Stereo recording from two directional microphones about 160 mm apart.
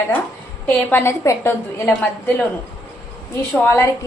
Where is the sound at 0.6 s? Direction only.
15° left (ahead or behind).